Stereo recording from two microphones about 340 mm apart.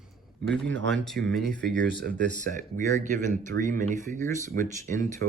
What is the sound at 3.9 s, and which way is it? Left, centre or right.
Speech, right.